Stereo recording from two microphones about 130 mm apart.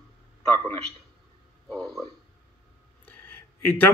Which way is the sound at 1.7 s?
5° left (ahead or behind).